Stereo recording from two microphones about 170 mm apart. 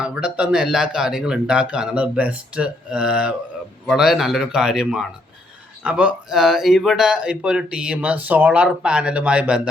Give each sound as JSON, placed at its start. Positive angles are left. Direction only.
{"t": 0.0, "sound": "speech", "side_deg": -5}